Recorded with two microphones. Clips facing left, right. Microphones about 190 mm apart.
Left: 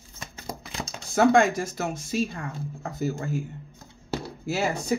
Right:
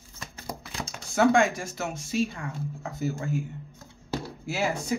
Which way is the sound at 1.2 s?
40° left (ahead or behind).